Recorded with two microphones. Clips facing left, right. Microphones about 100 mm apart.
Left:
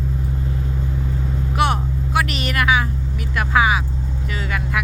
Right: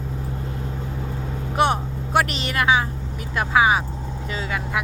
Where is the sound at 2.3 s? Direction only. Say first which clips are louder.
Left 1 dB; 25° right (ahead or behind).